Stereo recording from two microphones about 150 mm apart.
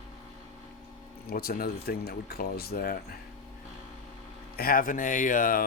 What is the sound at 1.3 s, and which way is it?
Speech, 85° left.